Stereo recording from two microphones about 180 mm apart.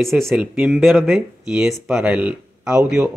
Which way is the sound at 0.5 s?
10° right (ahead or behind).